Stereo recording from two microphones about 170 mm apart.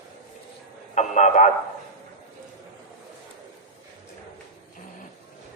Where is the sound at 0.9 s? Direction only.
45° left (ahead or behind).